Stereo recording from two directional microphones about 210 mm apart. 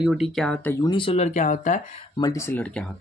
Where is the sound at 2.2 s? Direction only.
15° left (ahead or behind).